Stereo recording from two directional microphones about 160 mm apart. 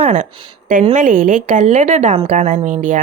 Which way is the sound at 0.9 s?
50° right (ahead or behind).